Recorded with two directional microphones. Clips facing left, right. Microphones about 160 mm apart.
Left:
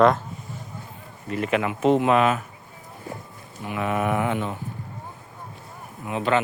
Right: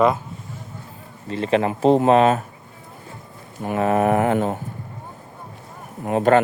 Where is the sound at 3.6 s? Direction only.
40° right (ahead or behind).